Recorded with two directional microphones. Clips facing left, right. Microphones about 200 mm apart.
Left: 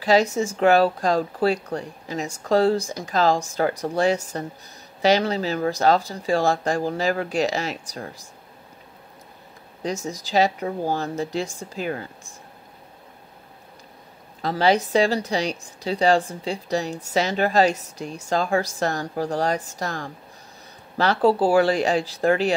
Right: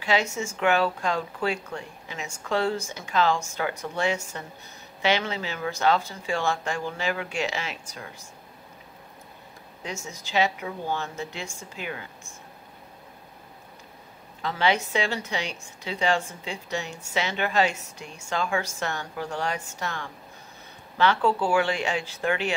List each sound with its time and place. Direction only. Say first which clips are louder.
0.0 s a woman's voice: left 7 dB; 35° left (ahead or behind)
10.0 s a woman's voice: left 4 dB; 35° left (ahead or behind)
14.4 s a woman's voice: left 5 dB; 40° left (ahead or behind)